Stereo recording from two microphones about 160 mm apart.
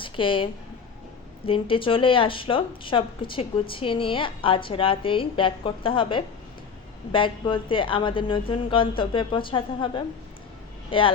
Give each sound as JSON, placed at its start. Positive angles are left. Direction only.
{"t": 0.0, "sound": "a woman's voice", "side_deg": 30}
{"t": 1.5, "sound": "speech", "side_deg": 35}